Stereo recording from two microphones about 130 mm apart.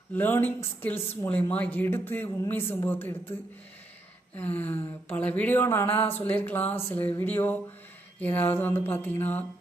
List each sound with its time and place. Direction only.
0.1 s speech: 15° left (ahead or behind)
4.4 s speech: 15° left (ahead or behind)